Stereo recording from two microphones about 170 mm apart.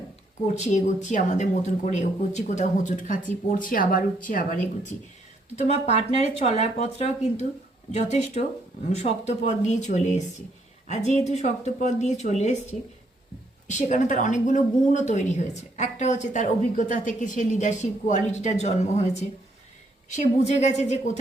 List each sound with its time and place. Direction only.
0.4 s a woman's voice: 40° left (ahead or behind)
5.5 s a woman's voice: 40° left (ahead or behind)
13.7 s a woman's voice: 45° left (ahead or behind)